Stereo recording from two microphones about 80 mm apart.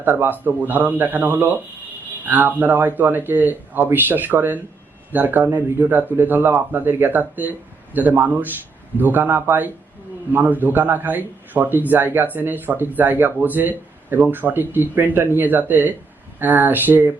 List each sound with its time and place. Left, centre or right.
0.0 s a man's voice: right